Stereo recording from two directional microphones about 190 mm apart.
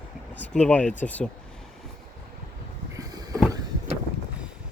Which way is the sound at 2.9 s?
20° right (ahead or behind).